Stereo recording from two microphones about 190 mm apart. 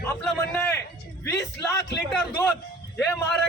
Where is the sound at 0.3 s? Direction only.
10° left (ahead or behind).